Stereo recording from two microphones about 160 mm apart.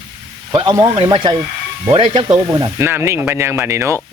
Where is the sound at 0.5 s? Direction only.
25° right (ahead or behind).